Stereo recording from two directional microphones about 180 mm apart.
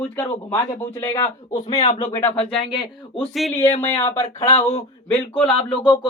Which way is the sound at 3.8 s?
15° left (ahead or behind).